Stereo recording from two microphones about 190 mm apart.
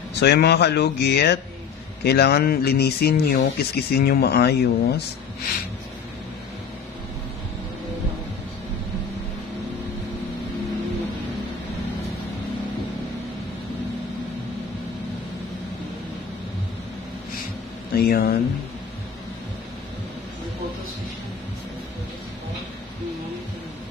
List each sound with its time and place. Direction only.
0.1 s speech: 60° left (ahead or behind)
17.9 s speech: 55° left (ahead or behind)